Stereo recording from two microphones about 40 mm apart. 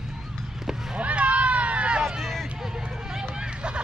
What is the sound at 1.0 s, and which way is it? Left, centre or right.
Run, right.